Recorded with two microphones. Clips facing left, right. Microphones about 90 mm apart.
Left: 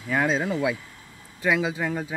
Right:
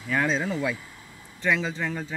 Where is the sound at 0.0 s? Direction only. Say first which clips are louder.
Left 2 dB; 10° left (ahead or behind).